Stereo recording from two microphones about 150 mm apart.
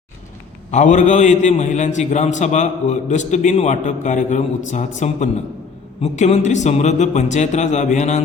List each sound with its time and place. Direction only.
0.7 s a man's voice: 55° left (ahead or behind)